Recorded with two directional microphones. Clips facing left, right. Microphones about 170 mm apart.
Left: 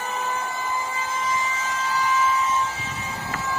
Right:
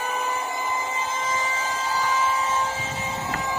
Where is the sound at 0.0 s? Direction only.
15° right (ahead or behind); by 3.5 s 30° right (ahead or behind).